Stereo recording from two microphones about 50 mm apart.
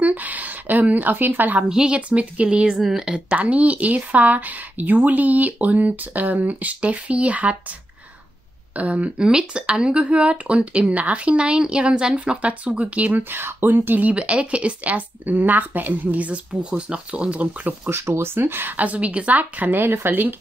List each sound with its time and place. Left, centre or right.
0.0 s a sound: right
1.7 s speech: centre
2.0 s speech: right
2.8 s speech: centre
3.3 s a woman's voice: right
8.7 s speech: right
13.3 s a woman's voice: right
17.8 s speech: right
18.8 s a woman's voice: right